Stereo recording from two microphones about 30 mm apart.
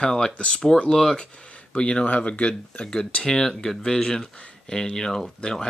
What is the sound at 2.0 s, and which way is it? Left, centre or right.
Speech, left.